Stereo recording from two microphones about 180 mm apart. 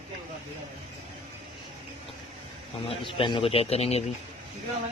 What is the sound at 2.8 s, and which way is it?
Speech, 30° left (ahead or behind).